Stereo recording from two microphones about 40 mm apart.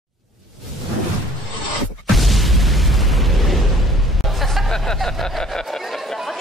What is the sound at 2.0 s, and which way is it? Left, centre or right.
Boom, centre.